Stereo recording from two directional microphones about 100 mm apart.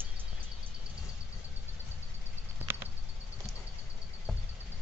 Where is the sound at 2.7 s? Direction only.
20° right (ahead or behind).